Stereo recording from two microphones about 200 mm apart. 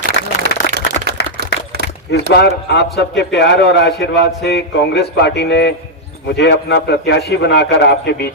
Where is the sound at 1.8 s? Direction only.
55° left (ahead or behind).